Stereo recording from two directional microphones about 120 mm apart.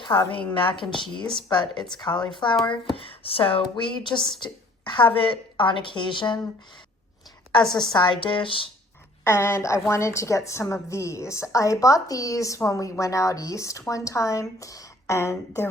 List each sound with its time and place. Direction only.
0.0 s a woman's voice: 40° left (ahead or behind)
7.6 s a woman's voice: 5° left (ahead or behind)
7.9 s a woman's voice: 40° left (ahead or behind)
9.2 s a woman's voice: 20° left (ahead or behind)